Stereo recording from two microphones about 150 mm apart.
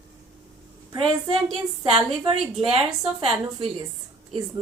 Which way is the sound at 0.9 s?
35° right (ahead or behind).